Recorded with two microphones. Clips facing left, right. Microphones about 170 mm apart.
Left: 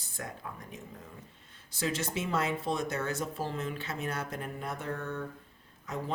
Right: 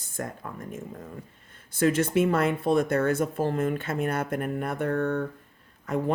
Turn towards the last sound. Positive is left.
turn(degrees=-55)  # may be behind; listen again after turning